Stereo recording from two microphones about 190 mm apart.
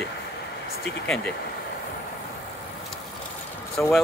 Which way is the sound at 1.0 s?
5° left (ahead or behind).